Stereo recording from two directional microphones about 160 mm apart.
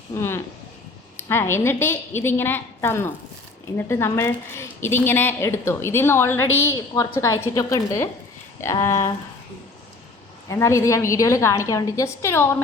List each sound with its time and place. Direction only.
0.2 s a woman's voice: 15° left (ahead or behind)
10.5 s a woman's voice: 20° left (ahead or behind)